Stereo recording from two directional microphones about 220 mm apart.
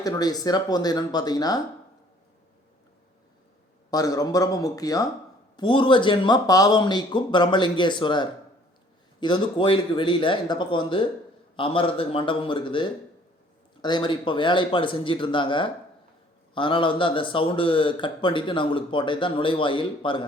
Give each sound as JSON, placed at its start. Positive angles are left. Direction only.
{"t": 0.0, "sound": "speech", "side_deg": 15}
{"t": 3.9, "sound": "a man's voice", "side_deg": 15}